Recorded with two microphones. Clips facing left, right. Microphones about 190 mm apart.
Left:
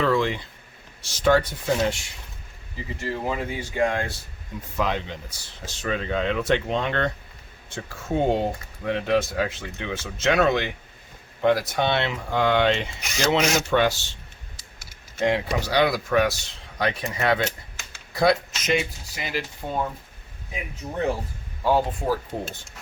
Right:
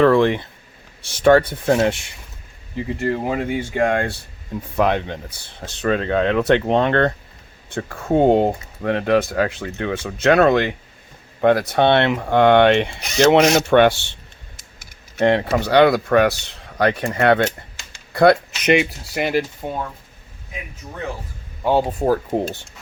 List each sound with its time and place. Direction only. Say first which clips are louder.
0.0 s speech: right 8 dB; 60° right (ahead or behind)
15.2 s speech: right 6 dB; 60° right (ahead or behind)
21.8 s speech: right 7 dB; 45° right (ahead or behind)